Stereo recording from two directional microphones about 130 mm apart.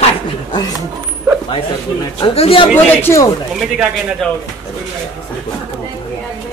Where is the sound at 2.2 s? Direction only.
45° left (ahead or behind).